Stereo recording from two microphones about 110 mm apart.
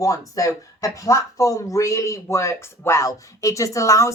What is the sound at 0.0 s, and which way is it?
Speech, 30° left (ahead or behind).